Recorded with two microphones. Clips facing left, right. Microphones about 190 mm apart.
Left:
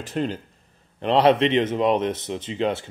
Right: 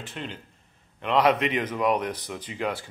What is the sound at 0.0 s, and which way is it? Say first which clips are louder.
Speech: left 10 dB; 40° left (ahead or behind).